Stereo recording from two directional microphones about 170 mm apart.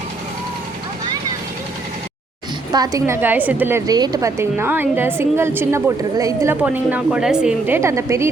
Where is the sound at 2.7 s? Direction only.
20° right (ahead or behind).